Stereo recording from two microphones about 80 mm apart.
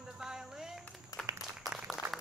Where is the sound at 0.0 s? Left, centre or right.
Centre.